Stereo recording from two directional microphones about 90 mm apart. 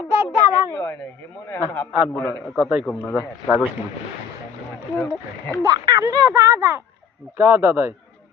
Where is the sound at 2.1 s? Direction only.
35° left (ahead or behind).